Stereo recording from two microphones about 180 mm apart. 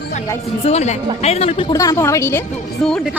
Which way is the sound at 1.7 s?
20° left (ahead or behind).